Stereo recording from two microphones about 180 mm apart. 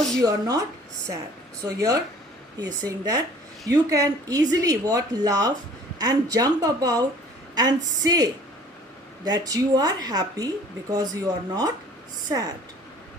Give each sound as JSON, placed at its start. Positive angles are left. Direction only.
{"t": 0.2, "sound": "speech", "side_deg": -20}
{"t": 1.6, "sound": "speech", "side_deg": -20}